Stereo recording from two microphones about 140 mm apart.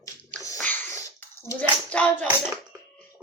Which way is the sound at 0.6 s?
10° left (ahead or behind).